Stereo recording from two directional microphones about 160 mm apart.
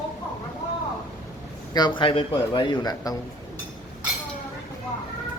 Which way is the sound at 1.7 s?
25° left (ahead or behind).